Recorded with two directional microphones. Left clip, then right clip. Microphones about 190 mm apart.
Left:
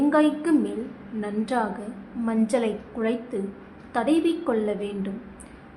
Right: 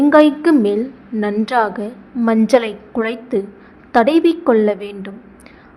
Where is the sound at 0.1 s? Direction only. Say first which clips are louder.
Right 10 dB; 30° right (ahead or behind).